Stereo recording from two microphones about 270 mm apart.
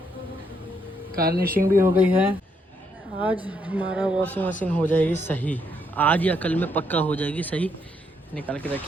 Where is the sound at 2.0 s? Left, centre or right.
Centre.